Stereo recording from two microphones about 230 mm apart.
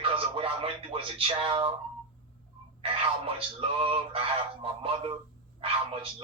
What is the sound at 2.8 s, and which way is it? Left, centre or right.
Speech, right.